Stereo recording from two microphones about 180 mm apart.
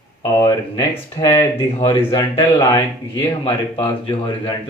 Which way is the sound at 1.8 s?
25° left (ahead or behind).